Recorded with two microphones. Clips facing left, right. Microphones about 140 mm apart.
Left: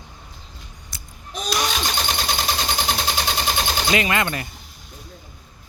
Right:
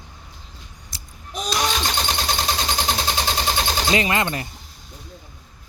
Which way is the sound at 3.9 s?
25° right (ahead or behind).